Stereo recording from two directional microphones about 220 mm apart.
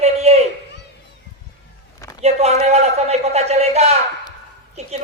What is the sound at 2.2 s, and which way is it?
A man's voice, 30° right (ahead or behind).